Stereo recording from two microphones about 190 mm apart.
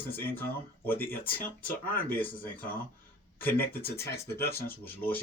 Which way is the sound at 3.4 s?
10° left (ahead or behind).